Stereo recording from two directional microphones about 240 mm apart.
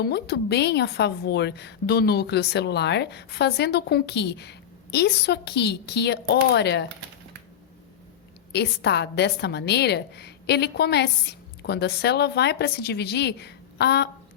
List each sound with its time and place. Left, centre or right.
0.0 s a woman's voice: left
8.5 s a woman's voice: left